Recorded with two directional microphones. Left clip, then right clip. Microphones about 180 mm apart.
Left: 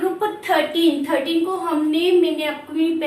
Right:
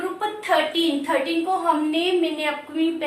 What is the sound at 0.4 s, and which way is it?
A woman's voice, 20° right (ahead or behind).